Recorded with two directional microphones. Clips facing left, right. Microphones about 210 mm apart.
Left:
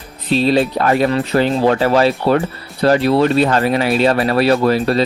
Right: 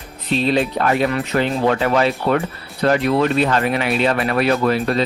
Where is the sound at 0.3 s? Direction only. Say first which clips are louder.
Left 4 dB; 35° left (ahead or behind).